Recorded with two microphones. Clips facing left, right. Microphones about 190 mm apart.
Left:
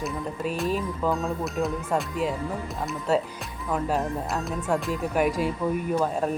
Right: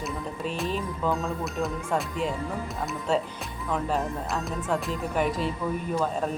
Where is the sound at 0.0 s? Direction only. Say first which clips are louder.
Left 2 dB; centre (ahead or behind).